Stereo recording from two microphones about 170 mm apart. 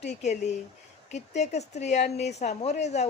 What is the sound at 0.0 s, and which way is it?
A woman's voice, 40° left (ahead or behind).